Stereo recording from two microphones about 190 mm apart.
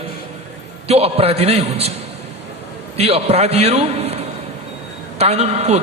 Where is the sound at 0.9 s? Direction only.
30° right (ahead or behind).